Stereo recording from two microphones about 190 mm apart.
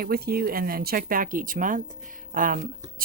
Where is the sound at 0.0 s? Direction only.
55° right (ahead or behind).